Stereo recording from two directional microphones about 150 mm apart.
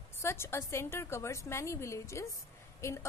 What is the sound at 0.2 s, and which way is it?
A woman's voice, 15° left (ahead or behind).